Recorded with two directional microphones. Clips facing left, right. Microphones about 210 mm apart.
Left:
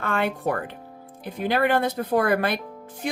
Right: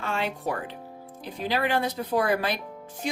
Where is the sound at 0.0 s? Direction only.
55° left (ahead or behind).